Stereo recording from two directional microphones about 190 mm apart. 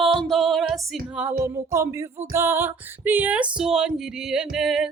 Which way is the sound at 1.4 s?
15° right (ahead or behind).